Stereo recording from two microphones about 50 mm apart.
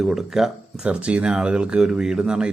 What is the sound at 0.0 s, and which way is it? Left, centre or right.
Speech, centre.